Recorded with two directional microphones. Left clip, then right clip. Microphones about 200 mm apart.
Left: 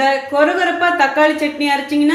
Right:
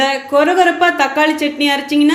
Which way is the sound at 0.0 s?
45° right (ahead or behind).